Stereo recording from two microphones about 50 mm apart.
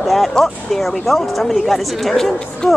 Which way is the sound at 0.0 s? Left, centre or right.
Centre.